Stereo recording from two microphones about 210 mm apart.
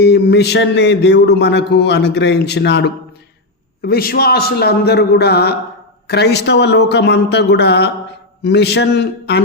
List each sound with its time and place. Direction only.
0.0 s a man's voice: 50° left (ahead or behind)